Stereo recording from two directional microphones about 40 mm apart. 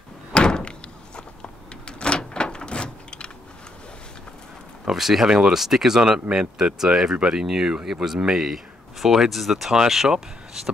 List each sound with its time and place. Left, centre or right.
0.3 s door: left
4.8 s speech: centre